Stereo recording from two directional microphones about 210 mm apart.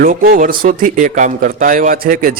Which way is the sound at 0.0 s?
45° right (ahead or behind).